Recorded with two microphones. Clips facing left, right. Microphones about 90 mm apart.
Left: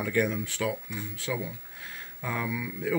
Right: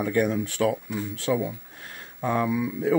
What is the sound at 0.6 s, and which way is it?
Speech, 55° right (ahead or behind).